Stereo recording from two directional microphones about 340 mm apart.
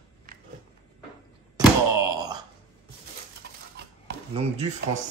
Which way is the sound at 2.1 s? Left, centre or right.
Centre.